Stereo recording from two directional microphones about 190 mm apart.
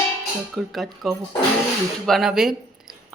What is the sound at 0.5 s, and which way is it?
Speech, centre (ahead or behind).